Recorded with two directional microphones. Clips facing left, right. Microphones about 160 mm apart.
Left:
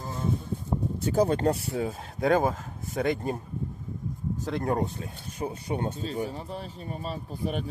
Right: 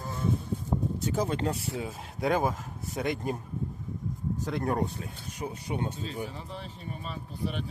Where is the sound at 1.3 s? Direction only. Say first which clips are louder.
Left 5 dB; 40° left (ahead or behind).